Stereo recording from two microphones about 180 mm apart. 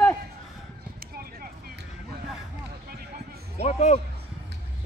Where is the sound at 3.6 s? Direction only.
40° left (ahead or behind).